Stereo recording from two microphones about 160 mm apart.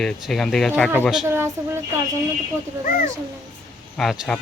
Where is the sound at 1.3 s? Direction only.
15° right (ahead or behind).